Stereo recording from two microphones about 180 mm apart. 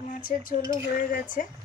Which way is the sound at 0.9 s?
50° left (ahead or behind).